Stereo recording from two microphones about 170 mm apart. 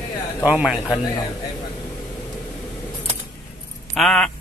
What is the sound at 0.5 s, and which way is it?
Speech, 5° right (ahead or behind).